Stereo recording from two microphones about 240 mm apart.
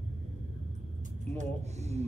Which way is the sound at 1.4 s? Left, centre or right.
Right.